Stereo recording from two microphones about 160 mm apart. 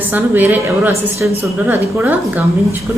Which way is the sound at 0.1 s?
10° right (ahead or behind).